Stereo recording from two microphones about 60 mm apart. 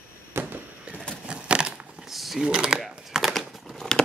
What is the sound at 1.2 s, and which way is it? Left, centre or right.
Crushing, centre.